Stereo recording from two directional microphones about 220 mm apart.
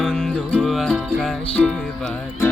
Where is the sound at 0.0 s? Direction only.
5° left (ahead or behind).